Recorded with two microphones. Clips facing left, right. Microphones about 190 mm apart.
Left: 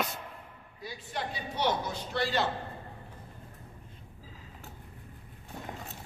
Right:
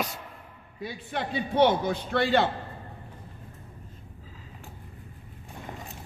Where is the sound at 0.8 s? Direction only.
60° right (ahead or behind).